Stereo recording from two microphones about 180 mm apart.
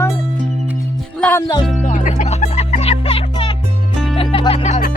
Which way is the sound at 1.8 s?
45° left (ahead or behind).